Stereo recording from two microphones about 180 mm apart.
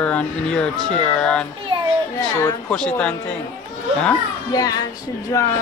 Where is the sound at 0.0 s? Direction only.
5° left (ahead or behind).